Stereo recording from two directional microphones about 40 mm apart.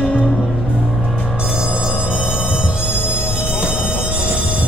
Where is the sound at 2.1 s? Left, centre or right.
Right.